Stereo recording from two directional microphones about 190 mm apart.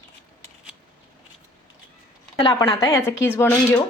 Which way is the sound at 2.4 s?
25° left (ahead or behind).